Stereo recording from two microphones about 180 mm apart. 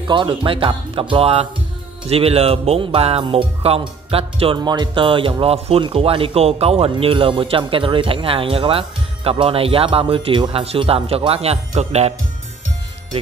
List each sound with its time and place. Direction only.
0.0 s speech: 25° right (ahead or behind)